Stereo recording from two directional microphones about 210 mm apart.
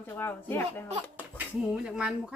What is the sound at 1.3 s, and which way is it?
Speech, 5° right (ahead or behind).